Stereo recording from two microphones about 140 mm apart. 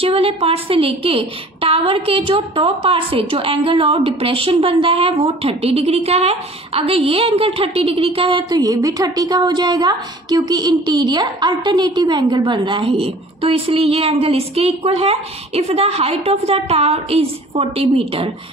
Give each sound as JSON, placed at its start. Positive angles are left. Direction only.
{"t": 0.0, "sound": "a woman's voice", "side_deg": -45}